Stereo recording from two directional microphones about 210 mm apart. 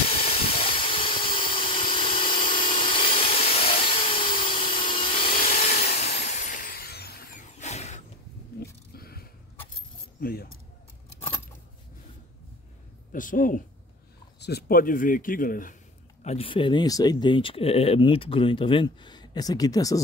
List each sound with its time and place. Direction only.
0.4 s engine: 25° left (ahead or behind)
3.3 s a sound: 30° left (ahead or behind)
5.3 s a sound: 40° left (ahead or behind)
7.5 s mechanisms: 30° left (ahead or behind)
8.5 s wild animals: 45° left (ahead or behind)
10.2 s speech: 45° left (ahead or behind)
13.1 s a man's voice: 40° left (ahead or behind)
16.3 s speech: 25° left (ahead or behind)